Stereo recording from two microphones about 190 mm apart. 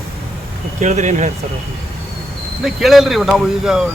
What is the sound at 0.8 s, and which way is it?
Speech, 40° right (ahead or behind).